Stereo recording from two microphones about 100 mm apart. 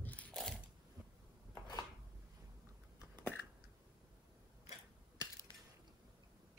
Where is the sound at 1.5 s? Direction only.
40° left (ahead or behind).